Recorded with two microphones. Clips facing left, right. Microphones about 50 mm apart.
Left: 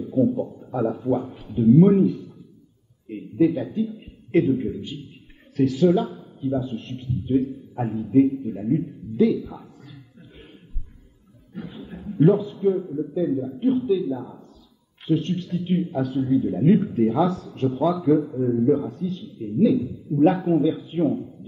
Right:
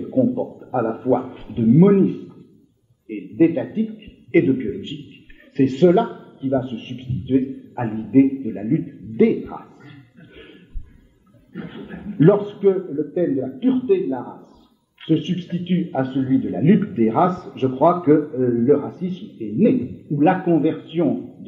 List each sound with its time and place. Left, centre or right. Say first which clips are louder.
0.0 s a man's voice: right 2 dB; right
8.5 s a sound: right 2 dB; right
11.5 s speech: right 3 dB; right